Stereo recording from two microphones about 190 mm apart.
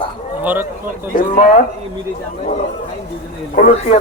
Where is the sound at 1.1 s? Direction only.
40° left (ahead or behind).